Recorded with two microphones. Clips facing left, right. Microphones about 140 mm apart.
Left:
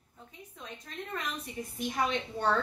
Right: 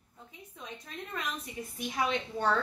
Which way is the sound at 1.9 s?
5° right (ahead or behind).